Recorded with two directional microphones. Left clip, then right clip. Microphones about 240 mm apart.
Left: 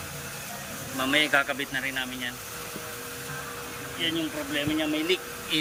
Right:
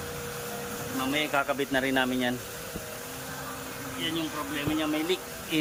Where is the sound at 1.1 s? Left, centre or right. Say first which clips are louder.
Left 5 dB; centre.